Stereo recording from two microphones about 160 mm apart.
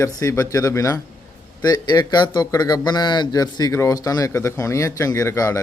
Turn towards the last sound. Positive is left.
turn(degrees=20)  # may be behind; listen again after turning